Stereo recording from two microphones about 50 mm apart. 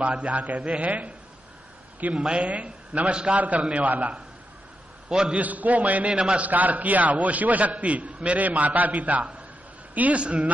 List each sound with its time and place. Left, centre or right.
0.0 s a man's voice: right
3.3 s a man's voice: right
5.3 s a man's voice: right
6.1 s a man's voice: centre
6.4 s a man's voice: right